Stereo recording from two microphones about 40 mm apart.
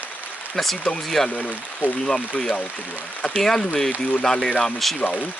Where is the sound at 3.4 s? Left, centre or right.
Centre.